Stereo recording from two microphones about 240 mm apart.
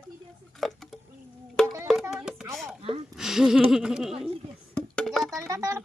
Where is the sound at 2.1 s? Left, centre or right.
Centre.